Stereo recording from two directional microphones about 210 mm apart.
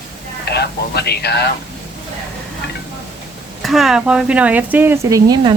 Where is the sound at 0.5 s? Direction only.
50° left (ahead or behind).